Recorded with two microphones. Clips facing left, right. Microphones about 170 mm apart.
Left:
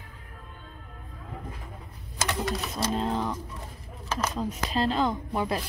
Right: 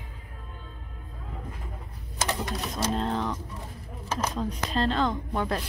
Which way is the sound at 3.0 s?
5° left (ahead or behind).